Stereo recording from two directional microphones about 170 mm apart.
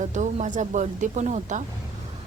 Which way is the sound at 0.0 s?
45° right (ahead or behind).